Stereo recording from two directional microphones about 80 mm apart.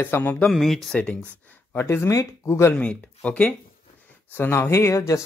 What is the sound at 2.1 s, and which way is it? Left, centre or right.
Speech, left.